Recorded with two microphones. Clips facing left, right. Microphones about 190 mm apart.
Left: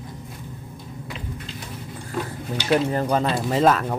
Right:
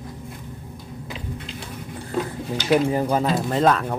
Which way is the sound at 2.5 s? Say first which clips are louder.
Right 1 dB; 10° right (ahead or behind).